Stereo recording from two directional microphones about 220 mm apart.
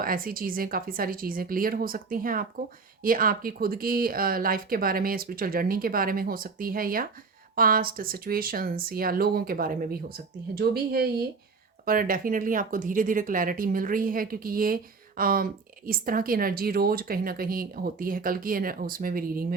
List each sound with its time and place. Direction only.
0.0 s speech: 40° right (ahead or behind)